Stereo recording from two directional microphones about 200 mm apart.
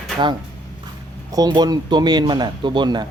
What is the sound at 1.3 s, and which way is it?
Speech, 20° right (ahead or behind).